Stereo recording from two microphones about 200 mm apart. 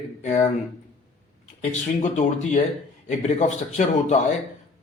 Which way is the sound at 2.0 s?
35° left (ahead or behind).